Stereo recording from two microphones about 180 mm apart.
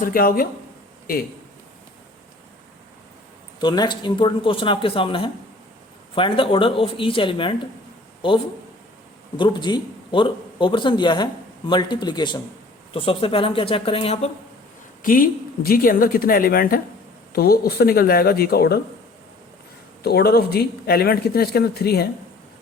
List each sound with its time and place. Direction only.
0.0 s speech: 50° left (ahead or behind)
3.6 s a man's voice: 25° left (ahead or behind)
9.4 s a man's voice: 25° left (ahead or behind)
15.0 s speech: 50° left (ahead or behind)
20.0 s speech: 60° left (ahead or behind)